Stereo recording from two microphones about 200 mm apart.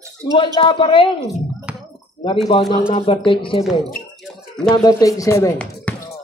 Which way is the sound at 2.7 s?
25° left (ahead or behind).